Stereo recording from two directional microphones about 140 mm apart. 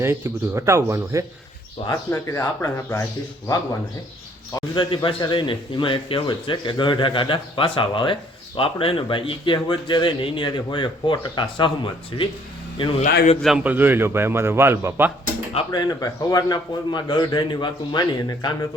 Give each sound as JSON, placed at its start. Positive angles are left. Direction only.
{"t": 0.0, "sound": "speech", "side_deg": -20}
{"t": 1.9, "sound": "a man's voice", "side_deg": 20}
{"t": 4.7, "sound": "speech", "side_deg": 35}
{"t": 13.0, "sound": "speech", "side_deg": 55}
{"t": 13.7, "sound": "a man's voice", "side_deg": -15}
{"t": 15.7, "sound": "a man's voice", "side_deg": 25}